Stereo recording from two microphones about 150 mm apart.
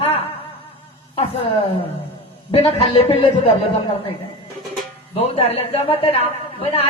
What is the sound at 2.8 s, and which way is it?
Speech, 40° left (ahead or behind).